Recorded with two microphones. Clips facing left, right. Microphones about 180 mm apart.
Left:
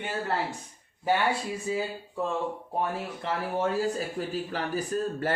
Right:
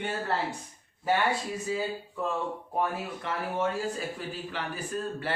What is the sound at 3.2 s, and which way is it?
Speech, 35° left (ahead or behind).